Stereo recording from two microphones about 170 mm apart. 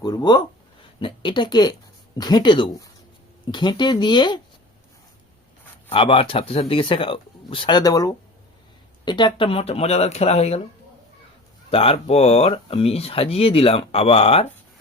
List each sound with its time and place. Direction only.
0.0 s speech: 25° left (ahead or behind)
5.9 s speech: 35° left (ahead or behind)
11.7 s speech: 35° left (ahead or behind)